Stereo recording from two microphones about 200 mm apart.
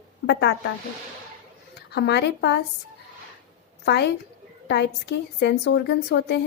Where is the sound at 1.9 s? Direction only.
55° left (ahead or behind).